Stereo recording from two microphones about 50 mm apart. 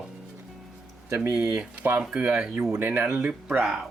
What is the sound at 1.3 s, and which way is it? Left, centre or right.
Speech, centre.